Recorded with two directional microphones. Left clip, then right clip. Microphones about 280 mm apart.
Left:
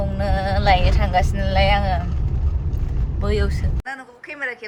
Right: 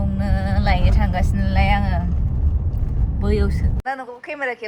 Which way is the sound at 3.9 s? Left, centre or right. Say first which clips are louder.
Right 4 dB; centre.